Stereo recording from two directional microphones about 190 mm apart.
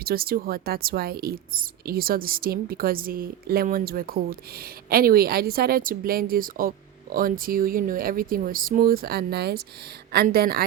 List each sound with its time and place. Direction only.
0.0 s speech: 55° right (ahead or behind)